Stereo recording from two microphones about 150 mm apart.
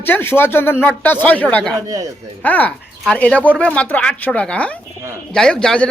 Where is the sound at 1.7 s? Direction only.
20° right (ahead or behind).